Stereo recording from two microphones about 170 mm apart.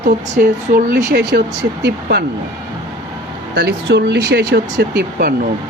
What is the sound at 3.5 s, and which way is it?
Speech, 75° right (ahead or behind).